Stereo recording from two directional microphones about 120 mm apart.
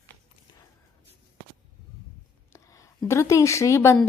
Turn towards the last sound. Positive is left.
turn(degrees=25)  # may be behind; listen again after turning